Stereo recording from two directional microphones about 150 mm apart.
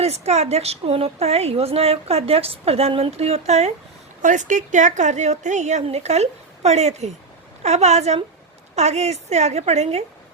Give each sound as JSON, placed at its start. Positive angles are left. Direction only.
{"t": 0.0, "sound": "a woman's voice", "side_deg": -45}